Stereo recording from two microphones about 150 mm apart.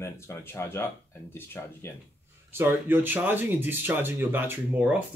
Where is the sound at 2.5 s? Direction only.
15° right (ahead or behind).